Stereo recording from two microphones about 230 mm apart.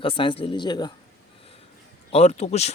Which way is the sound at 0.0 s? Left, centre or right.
Left.